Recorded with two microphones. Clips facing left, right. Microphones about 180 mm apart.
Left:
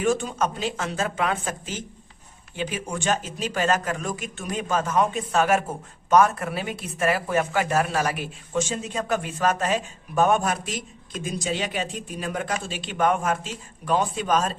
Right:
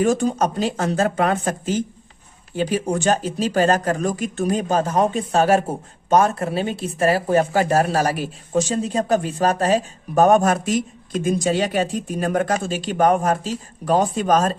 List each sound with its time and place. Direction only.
0.0 s speech: 40° right (ahead or behind)